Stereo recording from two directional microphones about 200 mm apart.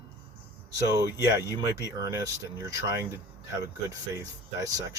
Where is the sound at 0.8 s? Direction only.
15° right (ahead or behind).